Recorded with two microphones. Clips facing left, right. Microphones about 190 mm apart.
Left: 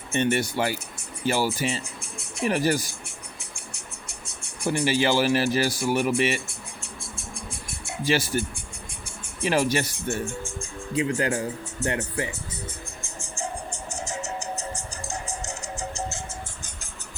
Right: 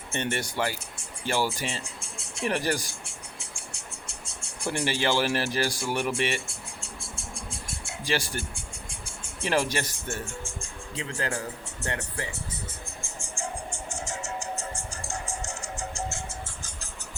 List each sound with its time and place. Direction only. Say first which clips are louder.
0.1 s speech: left 7 dB; 15° left (ahead or behind)
4.3 s speech: left 5 dB; 20° left (ahead or behind)
5.5 s speech: left 5 dB; 5° left (ahead or behind)
6.1 s music: left 4 dB; 15° left (ahead or behind)
10.9 s speech: left 8 dB; 20° left (ahead or behind)
13.0 s music: left 2 dB; 20° left (ahead or behind)